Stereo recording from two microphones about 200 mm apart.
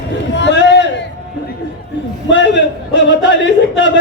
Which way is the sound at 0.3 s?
60° left (ahead or behind).